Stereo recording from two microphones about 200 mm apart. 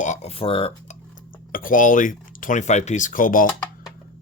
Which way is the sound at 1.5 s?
45° left (ahead or behind).